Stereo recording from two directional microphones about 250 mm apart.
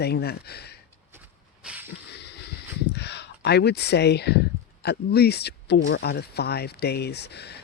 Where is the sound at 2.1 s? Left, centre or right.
Left.